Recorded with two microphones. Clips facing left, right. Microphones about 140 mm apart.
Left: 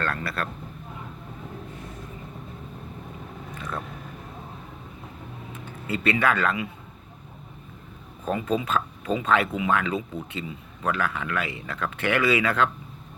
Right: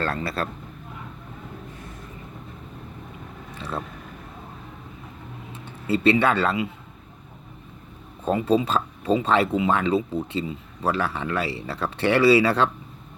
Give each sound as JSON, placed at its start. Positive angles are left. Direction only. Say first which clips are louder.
{"t": 0.0, "sound": "speech", "louder": "right 3 dB", "side_deg": -30}
{"t": 3.6, "sound": "a sound", "louder": "right 3 dB", "side_deg": -30}
{"t": 5.9, "sound": "speech", "louder": "right 4 dB", "side_deg": -30}
{"t": 8.2, "sound": "speech", "louder": "right 5 dB", "side_deg": -30}